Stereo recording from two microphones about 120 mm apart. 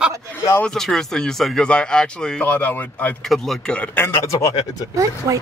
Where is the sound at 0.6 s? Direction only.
5° left (ahead or behind).